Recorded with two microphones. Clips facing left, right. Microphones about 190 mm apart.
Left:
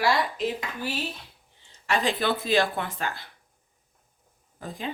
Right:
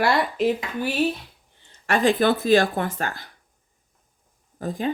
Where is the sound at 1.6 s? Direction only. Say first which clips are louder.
Right 6 dB; 55° right (ahead or behind).